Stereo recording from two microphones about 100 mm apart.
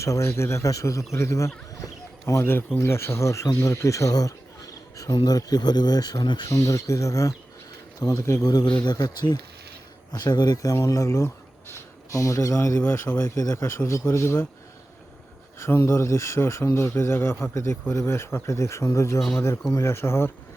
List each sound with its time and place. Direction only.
0.0 s speech: 30° left (ahead or behind); by 6.5 s 50° left (ahead or behind)
6.5 s speech: 30° left (ahead or behind)
8.6 s a man's voice: 50° left (ahead or behind); by 14.4 s 25° left (ahead or behind)
15.5 s a man's voice: 25° left (ahead or behind)